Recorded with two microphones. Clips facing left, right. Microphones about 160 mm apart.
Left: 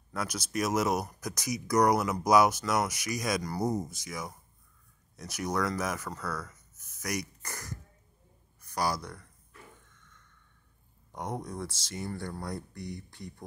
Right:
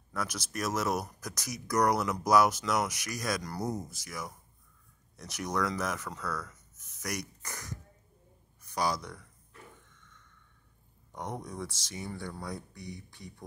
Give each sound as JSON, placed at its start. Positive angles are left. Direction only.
{"t": 0.1, "sound": "speech", "side_deg": 10}
{"t": 11.1, "sound": "speech", "side_deg": 10}
{"t": 11.7, "sound": "speech", "side_deg": -15}
{"t": 12.2, "sound": "speech", "side_deg": 10}